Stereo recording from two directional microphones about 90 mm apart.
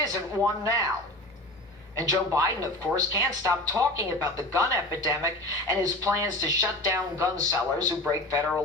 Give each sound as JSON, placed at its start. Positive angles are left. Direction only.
{"t": 0.0, "sound": "speech", "side_deg": -40}
{"t": 2.0, "sound": "speech", "side_deg": -40}